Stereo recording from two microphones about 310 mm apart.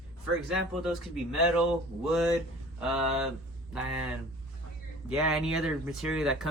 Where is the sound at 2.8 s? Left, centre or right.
Centre.